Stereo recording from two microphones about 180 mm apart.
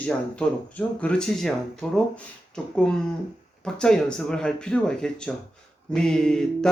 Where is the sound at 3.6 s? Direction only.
5° left (ahead or behind).